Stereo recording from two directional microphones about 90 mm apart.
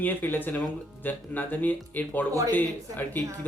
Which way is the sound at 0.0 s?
20° left (ahead or behind).